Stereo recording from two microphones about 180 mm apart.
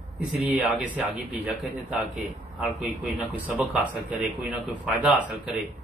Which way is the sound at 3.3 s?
5° right (ahead or behind).